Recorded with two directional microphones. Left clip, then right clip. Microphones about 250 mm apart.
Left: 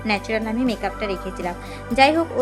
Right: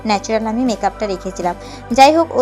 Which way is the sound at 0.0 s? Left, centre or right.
Centre.